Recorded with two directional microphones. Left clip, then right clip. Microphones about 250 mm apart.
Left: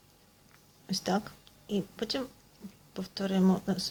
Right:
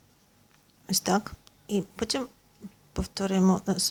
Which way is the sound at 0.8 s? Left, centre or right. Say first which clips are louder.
Right 5 dB; centre.